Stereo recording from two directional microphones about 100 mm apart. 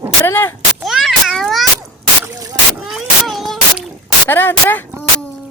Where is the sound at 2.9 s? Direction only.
Centre (ahead or behind).